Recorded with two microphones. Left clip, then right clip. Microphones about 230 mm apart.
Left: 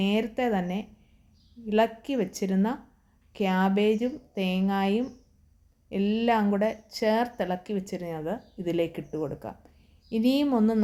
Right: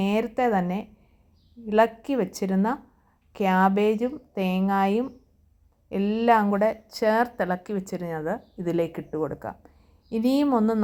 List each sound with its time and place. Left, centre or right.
0.0 s a woman's voice: centre